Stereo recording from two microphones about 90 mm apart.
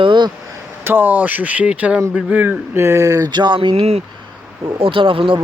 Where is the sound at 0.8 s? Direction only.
20° right (ahead or behind).